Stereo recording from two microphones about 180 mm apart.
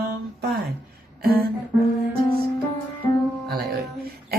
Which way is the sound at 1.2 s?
60° right (ahead or behind).